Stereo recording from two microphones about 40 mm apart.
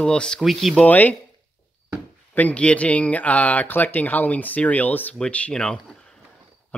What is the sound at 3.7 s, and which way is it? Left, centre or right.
Speech, left.